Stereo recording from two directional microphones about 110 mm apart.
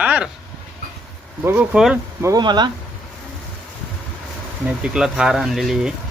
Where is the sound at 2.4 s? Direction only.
40° right (ahead or behind).